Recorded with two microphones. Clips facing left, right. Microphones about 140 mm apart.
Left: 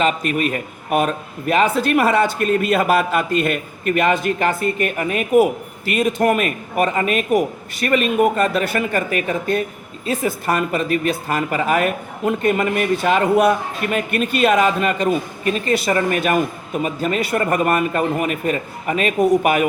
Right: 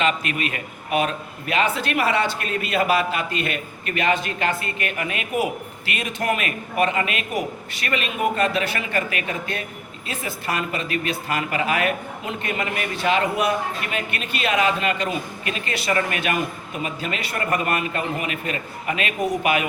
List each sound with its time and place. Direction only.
0.0 s a man's voice: 40° left (ahead or behind)